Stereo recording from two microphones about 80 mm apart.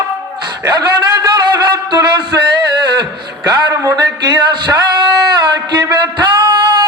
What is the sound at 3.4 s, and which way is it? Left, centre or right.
Speech, right.